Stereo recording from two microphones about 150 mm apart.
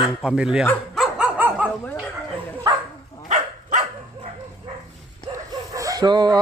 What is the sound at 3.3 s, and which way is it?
Dog, 55° right (ahead or behind).